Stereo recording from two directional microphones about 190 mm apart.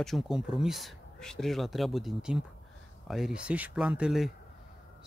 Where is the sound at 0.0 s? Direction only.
Centre (ahead or behind).